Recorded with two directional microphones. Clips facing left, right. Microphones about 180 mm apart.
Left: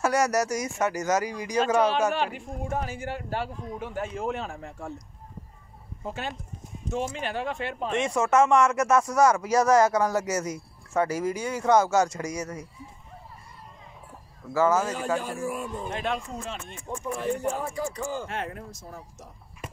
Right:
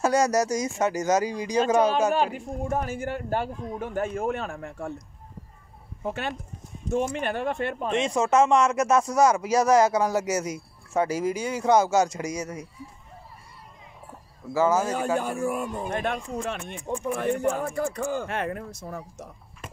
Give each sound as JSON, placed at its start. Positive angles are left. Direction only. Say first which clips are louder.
{"t": 0.0, "sound": "speech", "louder": "right 2 dB", "side_deg": -25}
{"t": 2.1, "sound": "speech", "louder": "right 4 dB", "side_deg": -40}
{"t": 6.0, "sound": "speech", "louder": "right 4 dB", "side_deg": -60}
{"t": 7.9, "sound": "speech", "louder": "right 1 dB", "side_deg": -25}
{"t": 9.1, "sound": "speech", "louder": "right 1 dB", "side_deg": -15}
{"t": 14.5, "sound": "speech", "louder": "right 1 dB", "side_deg": -15}
{"t": 15.1, "sound": "speech", "louder": "right 4 dB", "side_deg": -50}